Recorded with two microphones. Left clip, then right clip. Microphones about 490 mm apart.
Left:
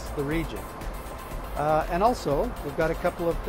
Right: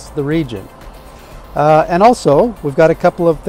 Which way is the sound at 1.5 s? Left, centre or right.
Right.